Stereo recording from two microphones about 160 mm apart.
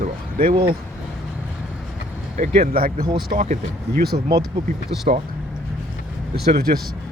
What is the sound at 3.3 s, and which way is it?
Speech, 50° right (ahead or behind).